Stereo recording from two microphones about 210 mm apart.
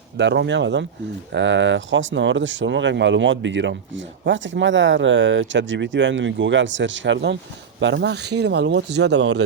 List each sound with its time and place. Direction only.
0.2 s speech: 55° right (ahead or behind)